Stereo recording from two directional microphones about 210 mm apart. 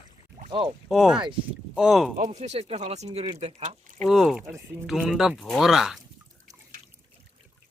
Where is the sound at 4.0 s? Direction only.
Centre (ahead or behind).